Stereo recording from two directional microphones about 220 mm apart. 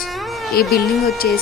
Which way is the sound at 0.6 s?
45° left (ahead or behind).